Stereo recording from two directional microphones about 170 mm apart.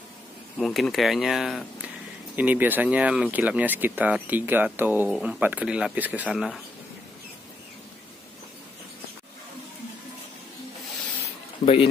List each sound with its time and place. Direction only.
0.6 s speech: centre (ahead or behind)
11.6 s speech: 35° left (ahead or behind)